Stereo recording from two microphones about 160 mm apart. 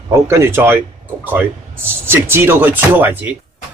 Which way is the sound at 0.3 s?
15° right (ahead or behind).